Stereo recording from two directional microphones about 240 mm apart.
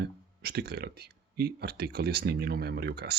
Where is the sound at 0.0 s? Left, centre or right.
Right.